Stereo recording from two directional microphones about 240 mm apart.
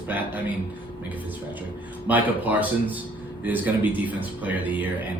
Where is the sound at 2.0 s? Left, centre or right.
Centre.